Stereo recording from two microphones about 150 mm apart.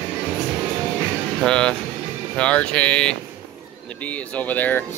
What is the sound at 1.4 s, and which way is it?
Speech, 5° left (ahead or behind).